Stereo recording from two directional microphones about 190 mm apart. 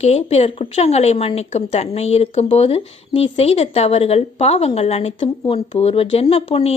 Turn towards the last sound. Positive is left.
turn(degrees=30)  # may be behind; listen again after turning